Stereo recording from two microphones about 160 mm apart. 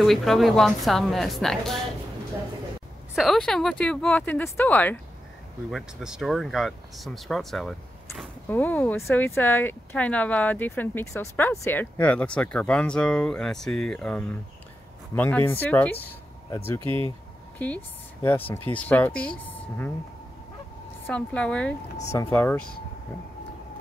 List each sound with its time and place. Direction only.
0.0 s speech: centre (ahead or behind)
3.2 s speech: centre (ahead or behind)
5.7 s speech: centre (ahead or behind); by 16.8 s 15° left (ahead or behind)
16.8 s speech: 30° right (ahead or behind)
17.6 s speech: 10° left (ahead or behind)
21.1 s speech: 5° left (ahead or behind)